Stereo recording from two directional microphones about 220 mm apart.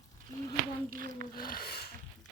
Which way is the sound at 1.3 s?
40° left (ahead or behind).